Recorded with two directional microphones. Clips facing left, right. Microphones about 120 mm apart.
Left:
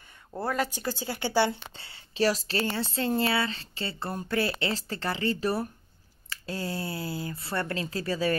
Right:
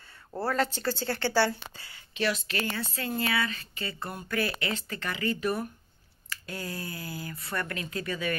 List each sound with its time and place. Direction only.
0.4 s a woman's voice: 15° left (ahead or behind); by 8.4 s 30° left (ahead or behind)